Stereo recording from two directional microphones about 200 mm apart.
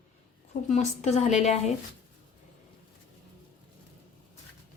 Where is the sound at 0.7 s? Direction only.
35° left (ahead or behind).